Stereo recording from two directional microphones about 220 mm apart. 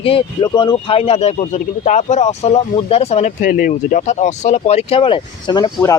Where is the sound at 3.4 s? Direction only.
40° left (ahead or behind); by 5.9 s 15° left (ahead or behind).